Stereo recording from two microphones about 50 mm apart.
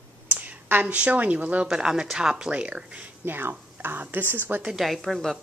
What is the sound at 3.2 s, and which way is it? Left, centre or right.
A woman's voice, right.